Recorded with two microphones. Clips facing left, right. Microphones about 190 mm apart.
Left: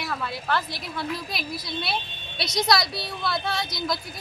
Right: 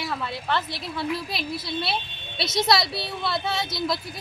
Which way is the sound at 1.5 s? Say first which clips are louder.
Right 4 dB; 25° right (ahead or behind).